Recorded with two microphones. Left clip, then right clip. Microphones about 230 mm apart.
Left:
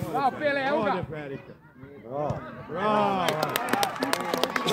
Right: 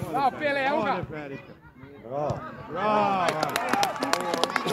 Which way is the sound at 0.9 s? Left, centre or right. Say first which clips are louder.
Even; left.